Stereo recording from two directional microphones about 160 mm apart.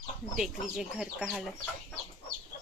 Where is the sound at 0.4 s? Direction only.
5° right (ahead or behind).